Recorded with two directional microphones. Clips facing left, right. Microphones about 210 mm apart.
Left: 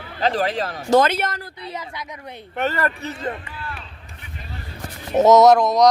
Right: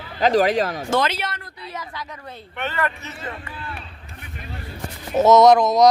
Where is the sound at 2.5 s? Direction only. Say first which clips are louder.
Left 3 dB; 40° left (ahead or behind).